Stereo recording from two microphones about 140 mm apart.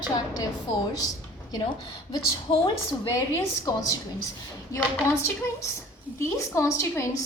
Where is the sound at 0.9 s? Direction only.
25° left (ahead or behind).